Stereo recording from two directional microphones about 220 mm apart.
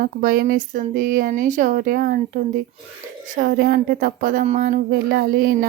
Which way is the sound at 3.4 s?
45° right (ahead or behind).